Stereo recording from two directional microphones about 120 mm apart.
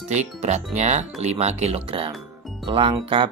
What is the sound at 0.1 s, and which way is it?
Speech, 70° right (ahead or behind).